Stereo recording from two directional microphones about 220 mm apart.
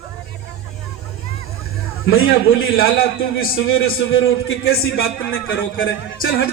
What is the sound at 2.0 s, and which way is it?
Speech, 65° left (ahead or behind).